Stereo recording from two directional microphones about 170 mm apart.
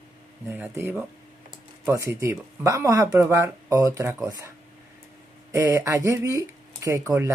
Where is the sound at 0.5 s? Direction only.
10° right (ahead or behind).